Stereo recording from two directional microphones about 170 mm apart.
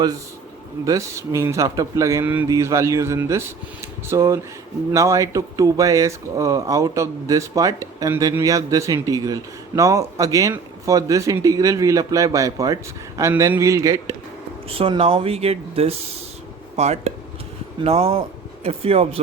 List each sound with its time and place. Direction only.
0.9 s a man's voice: 20° right (ahead or behind)
14.8 s speech: 35° right (ahead or behind)